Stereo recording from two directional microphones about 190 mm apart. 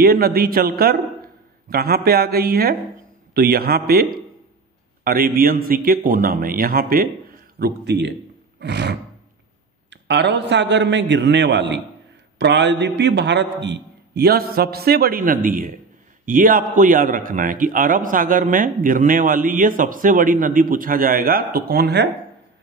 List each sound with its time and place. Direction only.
0.0 s a man's voice: 55° right (ahead or behind)
8.5 s a sound: 65° right (ahead or behind)
9.8 s a man's voice: 65° right (ahead or behind)